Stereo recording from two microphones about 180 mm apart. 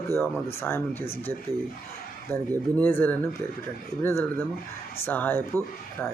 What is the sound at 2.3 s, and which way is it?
Speech, 10° left (ahead or behind).